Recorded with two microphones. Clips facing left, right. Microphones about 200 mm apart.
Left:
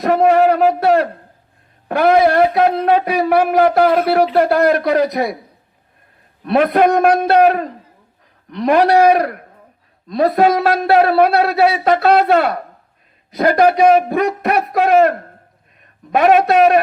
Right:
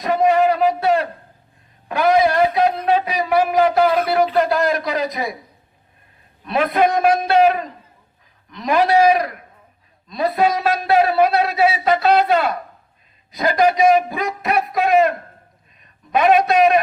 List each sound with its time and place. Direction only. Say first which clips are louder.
0.0 s a sound: left 4 dB; 60° left (ahead or behind)
1.9 s a man's voice: left 4 dB; 60° left (ahead or behind)
6.4 s a man's voice: left 5 dB; 55° left (ahead or behind)